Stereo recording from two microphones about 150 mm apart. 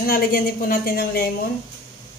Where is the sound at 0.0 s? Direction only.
75° left (ahead or behind); by 1.3 s 90° left.